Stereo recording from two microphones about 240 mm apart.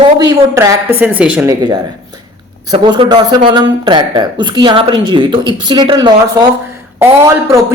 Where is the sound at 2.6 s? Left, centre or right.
Centre.